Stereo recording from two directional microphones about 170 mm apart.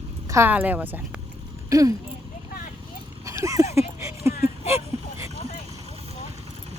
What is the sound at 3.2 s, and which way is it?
Horse, 20° right (ahead or behind).